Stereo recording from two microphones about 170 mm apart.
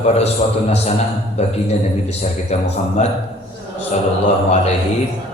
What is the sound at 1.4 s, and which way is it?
A man's voice, 40° left (ahead or behind).